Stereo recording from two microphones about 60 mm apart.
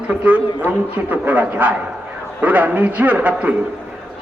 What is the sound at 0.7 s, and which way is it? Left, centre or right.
A man's voice, right.